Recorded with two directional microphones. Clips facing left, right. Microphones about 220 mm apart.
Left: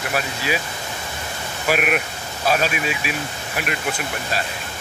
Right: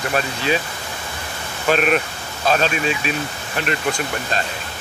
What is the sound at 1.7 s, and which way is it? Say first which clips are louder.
Speech: right 3 dB; 10° left (ahead or behind).